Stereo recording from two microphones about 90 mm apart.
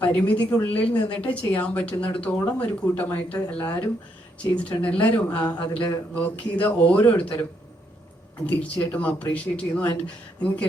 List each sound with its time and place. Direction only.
0.0 s a woman's voice: 15° left (ahead or behind)
8.4 s a woman's voice: 15° left (ahead or behind)